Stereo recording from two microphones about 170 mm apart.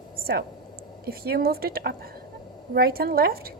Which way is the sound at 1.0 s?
65° right (ahead or behind).